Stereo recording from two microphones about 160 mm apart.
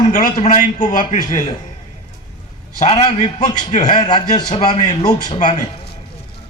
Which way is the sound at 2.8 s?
45° left (ahead or behind).